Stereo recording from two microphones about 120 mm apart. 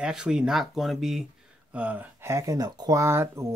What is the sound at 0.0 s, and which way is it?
Speech, 5° right (ahead or behind).